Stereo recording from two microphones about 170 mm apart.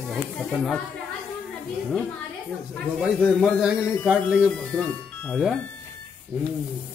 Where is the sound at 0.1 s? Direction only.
Centre (ahead or behind).